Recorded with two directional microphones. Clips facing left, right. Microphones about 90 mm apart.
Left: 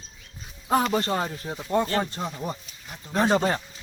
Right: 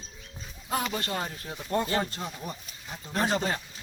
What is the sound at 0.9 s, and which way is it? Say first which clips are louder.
Speech: left 7 dB; 30° left (ahead or behind).